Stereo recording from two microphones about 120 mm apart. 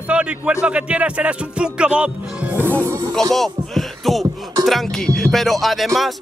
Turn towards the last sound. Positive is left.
turn(degrees=0)  # may be behind; listen again after turning